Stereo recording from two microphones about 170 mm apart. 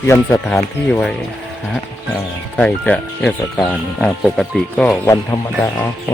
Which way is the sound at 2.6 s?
5° left (ahead or behind).